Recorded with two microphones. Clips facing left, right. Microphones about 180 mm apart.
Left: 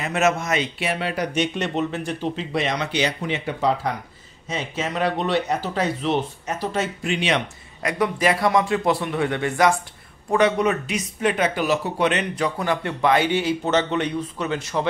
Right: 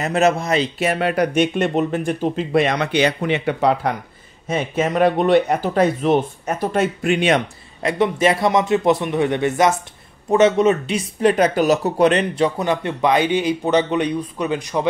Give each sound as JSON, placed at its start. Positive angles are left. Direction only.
{"t": 0.0, "sound": "speech", "side_deg": -35}
{"t": 0.8, "sound": "speech", "side_deg": -55}
{"t": 4.5, "sound": "speech", "side_deg": -55}
{"t": 7.8, "sound": "a man's voice", "side_deg": -25}
{"t": 12.4, "sound": "a man's voice", "side_deg": -20}